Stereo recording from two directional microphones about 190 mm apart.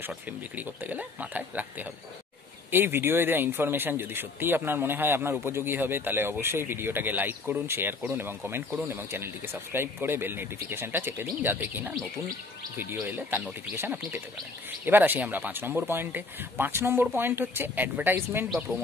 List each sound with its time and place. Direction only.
0.0 s speech: 10° right (ahead or behind)